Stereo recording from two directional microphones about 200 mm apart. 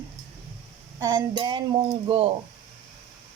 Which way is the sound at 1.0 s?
20° right (ahead or behind).